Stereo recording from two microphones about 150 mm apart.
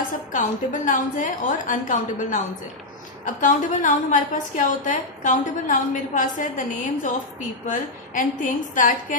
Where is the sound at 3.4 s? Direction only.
60° left (ahead or behind).